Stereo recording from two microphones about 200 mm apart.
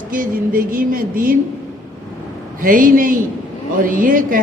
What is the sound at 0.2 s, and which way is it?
A woman's voice, 45° right (ahead or behind).